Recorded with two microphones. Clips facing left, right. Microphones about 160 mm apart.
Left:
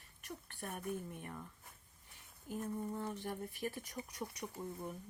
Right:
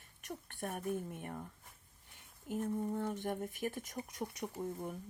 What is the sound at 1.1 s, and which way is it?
Speech, 50° right (ahead or behind).